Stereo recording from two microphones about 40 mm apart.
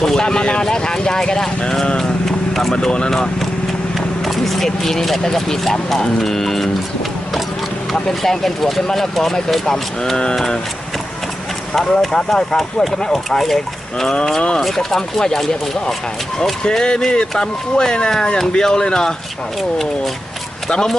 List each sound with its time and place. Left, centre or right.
0.0 s speech: centre
2.2 s vehicle: centre
4.3 s speech: centre
8.2 s speech: centre
11.7 s speech: centre
14.8 s speech: centre
16.6 s speech: left
20.7 s speech: centre